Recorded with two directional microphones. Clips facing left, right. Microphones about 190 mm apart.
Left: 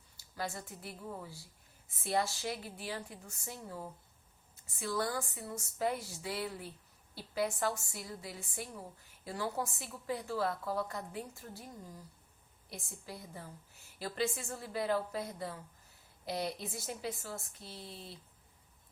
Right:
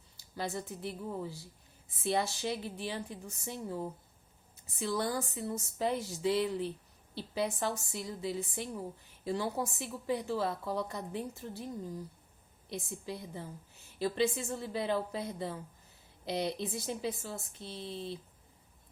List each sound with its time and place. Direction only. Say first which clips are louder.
0.3 s a woman's voice: right 4 dB; 20° right (ahead or behind)
12.6 s a woman's voice: right 8 dB; 20° right (ahead or behind)